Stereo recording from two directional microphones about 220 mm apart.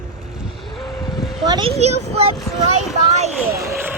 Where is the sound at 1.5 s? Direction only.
25° right (ahead or behind).